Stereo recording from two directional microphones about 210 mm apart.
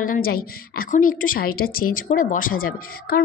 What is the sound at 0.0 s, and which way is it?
A woman's voice, 45° left (ahead or behind).